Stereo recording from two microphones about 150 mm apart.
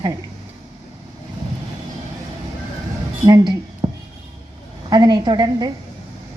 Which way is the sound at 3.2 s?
30° right (ahead or behind).